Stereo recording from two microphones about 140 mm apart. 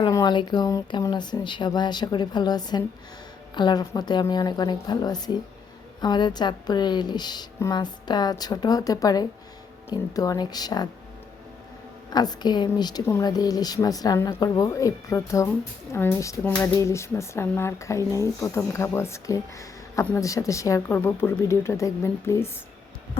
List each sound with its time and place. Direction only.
0.1 s speech: 30° left (ahead or behind)
12.1 s speech: 30° left (ahead or behind)